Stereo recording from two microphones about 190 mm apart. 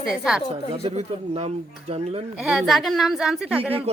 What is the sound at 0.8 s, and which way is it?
Speech, 30° right (ahead or behind).